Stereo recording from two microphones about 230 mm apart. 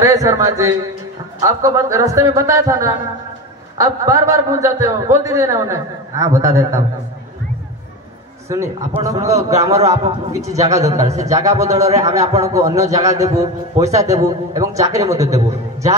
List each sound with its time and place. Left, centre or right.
0.0 s a man's voice: centre
8.5 s a man's voice: centre
9.8 s a man's voice: right
11.4 s a man's voice: centre